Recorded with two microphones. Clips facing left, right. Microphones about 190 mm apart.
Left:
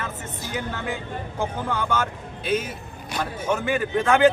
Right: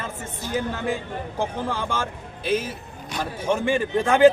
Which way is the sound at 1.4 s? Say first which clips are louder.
Even; 30° right (ahead or behind).